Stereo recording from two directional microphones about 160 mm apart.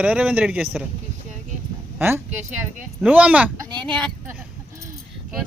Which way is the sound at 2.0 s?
15° right (ahead or behind).